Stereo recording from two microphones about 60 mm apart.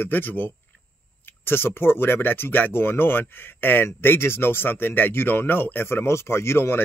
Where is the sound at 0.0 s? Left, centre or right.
Left.